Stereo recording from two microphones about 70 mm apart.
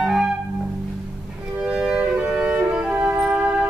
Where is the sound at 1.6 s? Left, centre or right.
Centre.